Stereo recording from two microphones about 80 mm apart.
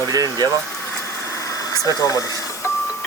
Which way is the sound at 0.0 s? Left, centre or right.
Right.